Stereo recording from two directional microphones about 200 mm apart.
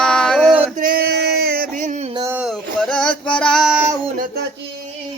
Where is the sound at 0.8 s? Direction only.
45° right (ahead or behind).